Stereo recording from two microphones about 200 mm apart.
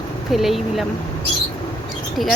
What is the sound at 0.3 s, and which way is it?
Speech, centre (ahead or behind).